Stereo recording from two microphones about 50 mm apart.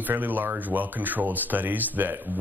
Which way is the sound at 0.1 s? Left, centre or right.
Right.